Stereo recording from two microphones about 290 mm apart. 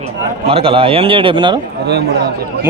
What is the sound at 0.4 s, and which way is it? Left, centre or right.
A man's voice, centre.